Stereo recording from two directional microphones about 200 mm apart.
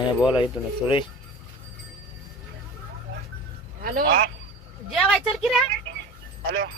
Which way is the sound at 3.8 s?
45° right (ahead or behind).